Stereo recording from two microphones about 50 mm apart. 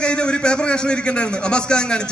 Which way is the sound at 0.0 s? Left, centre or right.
Centre.